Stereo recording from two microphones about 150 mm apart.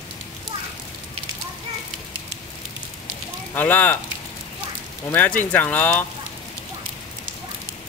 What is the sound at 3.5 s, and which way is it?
Speech, 10° left (ahead or behind).